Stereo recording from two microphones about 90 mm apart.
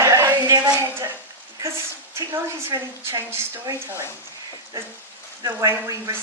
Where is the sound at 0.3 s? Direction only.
50° right (ahead or behind).